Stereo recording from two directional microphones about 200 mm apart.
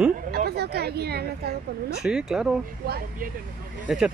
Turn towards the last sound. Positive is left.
turn(degrees=-5)  # may be behind; listen again after turning